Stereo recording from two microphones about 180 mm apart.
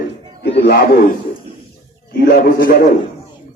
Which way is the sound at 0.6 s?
55° left (ahead or behind).